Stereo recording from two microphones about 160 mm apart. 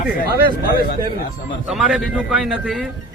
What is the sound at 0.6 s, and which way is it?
Speech, 70° left (ahead or behind).